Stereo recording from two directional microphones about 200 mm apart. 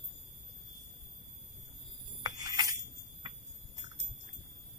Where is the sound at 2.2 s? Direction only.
20° right (ahead or behind).